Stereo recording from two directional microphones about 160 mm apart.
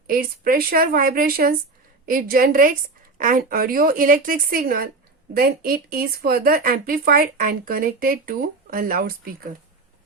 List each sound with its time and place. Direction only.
0.1 s speech: 65° right (ahead or behind)